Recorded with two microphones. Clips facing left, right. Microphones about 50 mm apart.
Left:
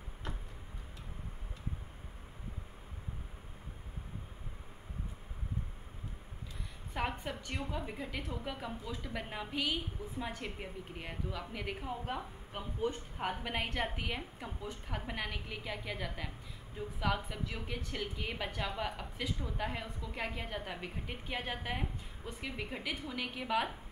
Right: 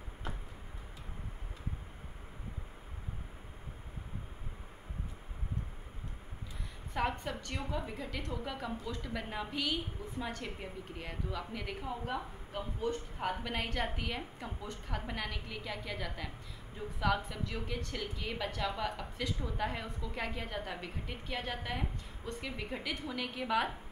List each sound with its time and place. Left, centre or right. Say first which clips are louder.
6.9 s a woman's voice: right 3 dB; centre
20.8 s a woman's voice: even; centre